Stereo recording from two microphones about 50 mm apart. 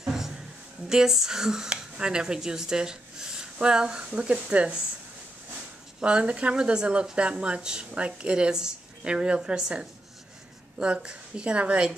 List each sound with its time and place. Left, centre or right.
0.0 s a sound: centre
0.8 s speech: centre
5.9 s speech: centre